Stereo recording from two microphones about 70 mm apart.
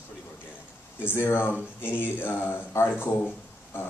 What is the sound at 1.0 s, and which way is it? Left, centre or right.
Speech, left.